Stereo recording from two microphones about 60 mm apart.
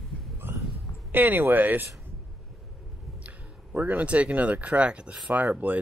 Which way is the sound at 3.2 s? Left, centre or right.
Right.